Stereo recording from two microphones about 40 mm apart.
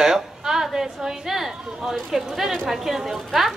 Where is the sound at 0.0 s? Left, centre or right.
Centre.